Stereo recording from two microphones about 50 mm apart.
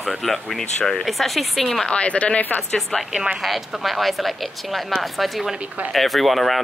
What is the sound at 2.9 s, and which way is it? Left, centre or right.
Speech, centre.